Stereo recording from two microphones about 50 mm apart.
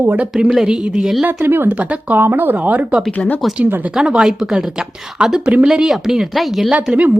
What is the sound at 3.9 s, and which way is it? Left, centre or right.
Speech, centre.